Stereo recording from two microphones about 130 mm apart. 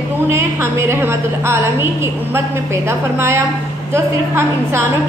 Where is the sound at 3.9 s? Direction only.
20° right (ahead or behind).